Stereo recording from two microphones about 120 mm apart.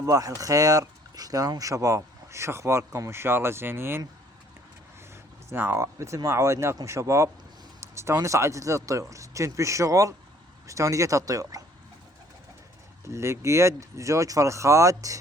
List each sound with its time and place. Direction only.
0.0 s speech: 30° right (ahead or behind)
5.5 s speech: 20° right (ahead or behind)
13.1 s speech: 25° right (ahead or behind)